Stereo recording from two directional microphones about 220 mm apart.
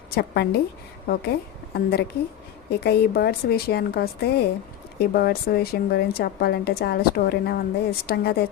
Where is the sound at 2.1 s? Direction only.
50° left (ahead or behind).